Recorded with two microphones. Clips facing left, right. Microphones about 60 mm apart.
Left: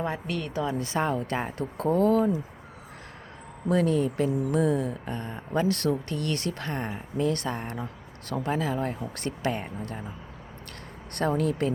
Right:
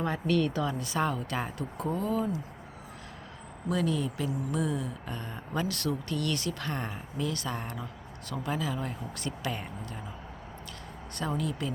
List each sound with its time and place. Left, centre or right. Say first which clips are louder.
0.0 s a woman's voice: right 3 dB; centre
0.6 s speech: left 2 dB; left
1.5 s speech: left 8 dB; left
3.7 s speech: left 6 dB; left
6.7 s speech: left 3 dB; left
7.3 s speech: left 5 dB; left
11.1 s speech: left 7 dB; left